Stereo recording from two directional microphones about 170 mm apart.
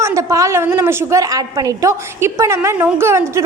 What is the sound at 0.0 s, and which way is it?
A woman's voice, 15° right (ahead or behind).